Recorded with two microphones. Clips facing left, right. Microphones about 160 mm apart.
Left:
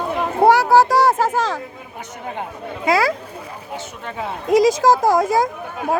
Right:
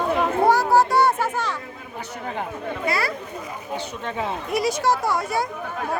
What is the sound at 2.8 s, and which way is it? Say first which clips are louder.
Speech: left 8 dB; 90° left.